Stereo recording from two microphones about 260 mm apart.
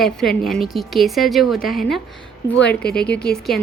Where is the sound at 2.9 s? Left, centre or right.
Left.